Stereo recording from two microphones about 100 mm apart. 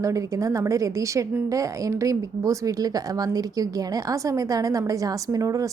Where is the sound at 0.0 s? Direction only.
35° right (ahead or behind).